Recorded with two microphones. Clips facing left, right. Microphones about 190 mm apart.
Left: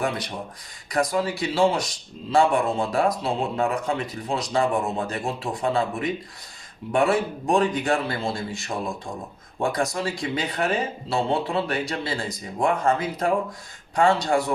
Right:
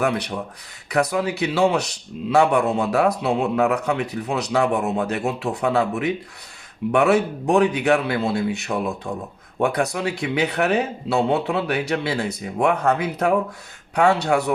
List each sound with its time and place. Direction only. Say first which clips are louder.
0.0 s speech: right 5 dB; 65° right (ahead or behind)